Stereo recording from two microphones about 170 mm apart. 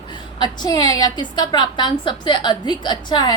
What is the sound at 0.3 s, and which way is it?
A woman's voice, 25° left (ahead or behind).